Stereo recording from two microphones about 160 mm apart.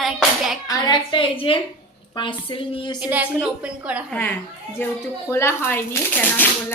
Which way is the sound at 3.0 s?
10° right (ahead or behind).